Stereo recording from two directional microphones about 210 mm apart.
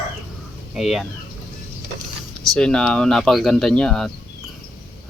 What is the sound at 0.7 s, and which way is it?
Speech, centre (ahead or behind).